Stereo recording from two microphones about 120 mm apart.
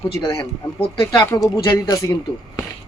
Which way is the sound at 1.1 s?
30° left (ahead or behind).